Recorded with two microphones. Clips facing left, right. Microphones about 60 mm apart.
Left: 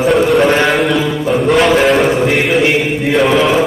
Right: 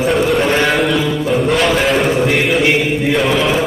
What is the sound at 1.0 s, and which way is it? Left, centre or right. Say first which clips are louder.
A man's voice: left 2 dB; centre.